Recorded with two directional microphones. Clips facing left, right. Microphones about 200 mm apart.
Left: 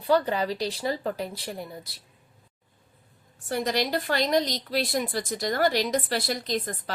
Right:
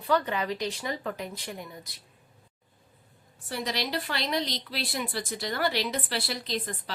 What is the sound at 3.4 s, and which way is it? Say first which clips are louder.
A woman's voice: left 6 dB; 45° left (ahead or behind).